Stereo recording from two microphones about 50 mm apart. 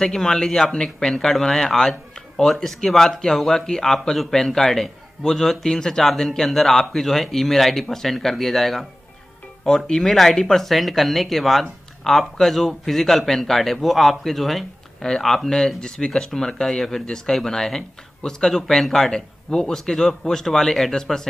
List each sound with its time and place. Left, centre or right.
0.0 s speech: centre